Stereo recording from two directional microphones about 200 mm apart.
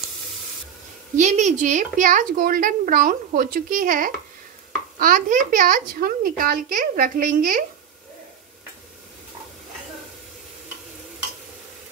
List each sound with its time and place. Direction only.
1.1 s a woman's voice: 35° right (ahead or behind)